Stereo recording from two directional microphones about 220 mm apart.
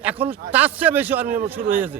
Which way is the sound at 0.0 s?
5° right (ahead or behind).